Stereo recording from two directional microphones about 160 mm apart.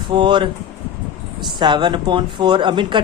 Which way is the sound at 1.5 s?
30° right (ahead or behind).